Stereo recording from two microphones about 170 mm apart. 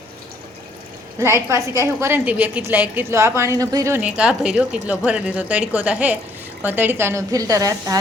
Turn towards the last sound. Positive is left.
turn(degrees=-20)  # may be behind; listen again after turning